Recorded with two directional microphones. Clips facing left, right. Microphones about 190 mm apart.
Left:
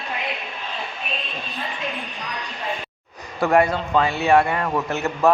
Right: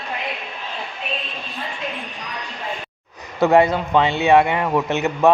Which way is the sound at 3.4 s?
20° right (ahead or behind).